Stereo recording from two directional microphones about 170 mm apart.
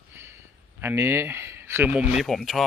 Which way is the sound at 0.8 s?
15° right (ahead or behind).